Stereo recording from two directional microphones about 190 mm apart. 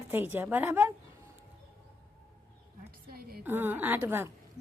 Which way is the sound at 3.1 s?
55° right (ahead or behind).